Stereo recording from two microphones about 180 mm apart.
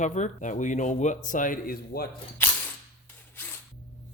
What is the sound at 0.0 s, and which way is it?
A man's voice, 40° left (ahead or behind).